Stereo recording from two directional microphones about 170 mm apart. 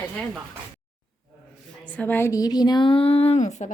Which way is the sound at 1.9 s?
10° left (ahead or behind).